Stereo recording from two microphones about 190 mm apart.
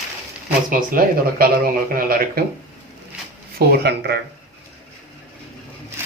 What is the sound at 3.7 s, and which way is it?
Speech, 60° right (ahead or behind).